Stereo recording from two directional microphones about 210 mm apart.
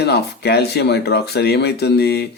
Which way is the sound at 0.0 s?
50° left (ahead or behind).